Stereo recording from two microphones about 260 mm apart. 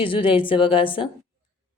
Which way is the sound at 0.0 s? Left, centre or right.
Centre.